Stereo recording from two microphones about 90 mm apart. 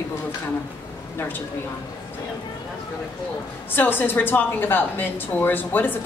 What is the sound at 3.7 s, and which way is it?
A woman's voice, 20° left (ahead or behind).